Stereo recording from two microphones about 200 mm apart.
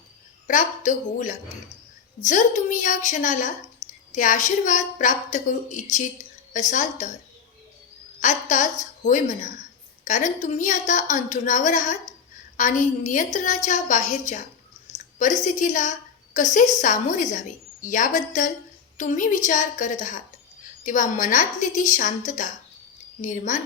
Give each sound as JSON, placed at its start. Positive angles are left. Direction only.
{"t": 0.4, "sound": "a woman's voice", "side_deg": 40}
{"t": 8.2, "sound": "a woman's voice", "side_deg": 35}